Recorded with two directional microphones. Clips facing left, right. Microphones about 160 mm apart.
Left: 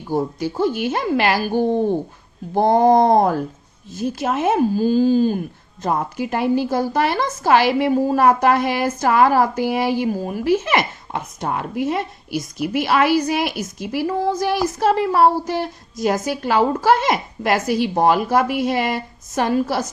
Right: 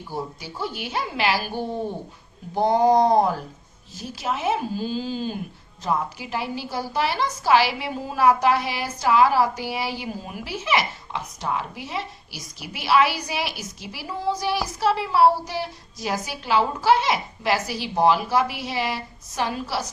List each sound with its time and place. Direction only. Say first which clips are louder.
0.1 s a woman's voice: left 11 dB; 50° left (ahead or behind)